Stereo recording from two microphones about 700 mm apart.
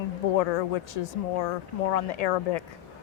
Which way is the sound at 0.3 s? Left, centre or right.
Left.